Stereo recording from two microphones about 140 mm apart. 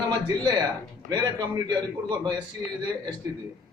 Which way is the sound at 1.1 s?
30° right (ahead or behind).